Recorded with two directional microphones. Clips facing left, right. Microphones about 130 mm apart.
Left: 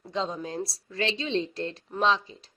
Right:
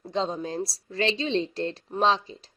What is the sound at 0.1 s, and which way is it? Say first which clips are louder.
A woman's voice: right 3 dB; 30° right (ahead or behind).